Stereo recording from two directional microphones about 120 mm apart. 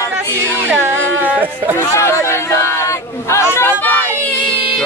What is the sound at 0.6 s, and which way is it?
Music, 20° right (ahead or behind).